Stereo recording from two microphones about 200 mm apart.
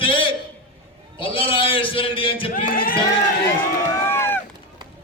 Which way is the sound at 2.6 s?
45° left (ahead or behind).